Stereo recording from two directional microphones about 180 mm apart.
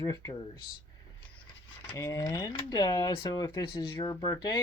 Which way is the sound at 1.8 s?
15° left (ahead or behind).